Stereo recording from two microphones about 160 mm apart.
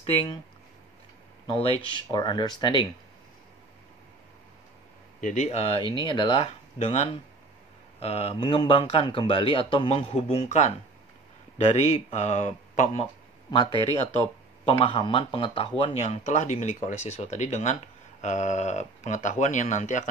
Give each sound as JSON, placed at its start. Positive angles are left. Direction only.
{"t": 0.0, "sound": "speech", "side_deg": 35}
{"t": 1.5, "sound": "speech", "side_deg": 35}
{"t": 5.2, "sound": "speech", "side_deg": 45}